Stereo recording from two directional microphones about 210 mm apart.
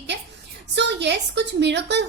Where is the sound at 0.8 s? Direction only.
55° right (ahead or behind).